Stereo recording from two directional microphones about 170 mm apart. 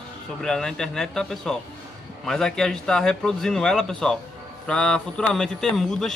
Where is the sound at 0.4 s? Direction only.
5° left (ahead or behind).